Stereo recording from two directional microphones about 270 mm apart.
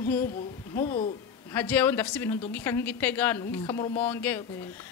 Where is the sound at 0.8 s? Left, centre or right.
Left.